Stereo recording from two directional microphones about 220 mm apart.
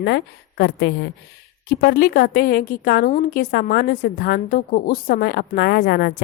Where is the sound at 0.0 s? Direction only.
50° left (ahead or behind).